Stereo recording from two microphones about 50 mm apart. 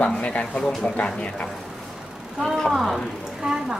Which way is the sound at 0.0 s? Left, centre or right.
Left.